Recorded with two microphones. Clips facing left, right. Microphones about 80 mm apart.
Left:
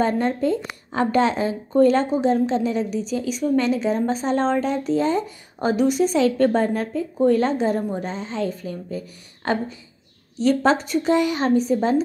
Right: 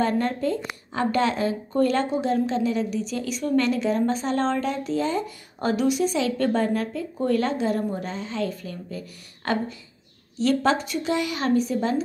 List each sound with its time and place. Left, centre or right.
0.0 s a woman's voice: left
3.1 s a woman's voice: centre